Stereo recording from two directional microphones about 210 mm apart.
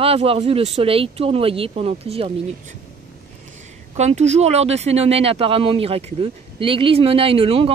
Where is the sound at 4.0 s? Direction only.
30° right (ahead or behind).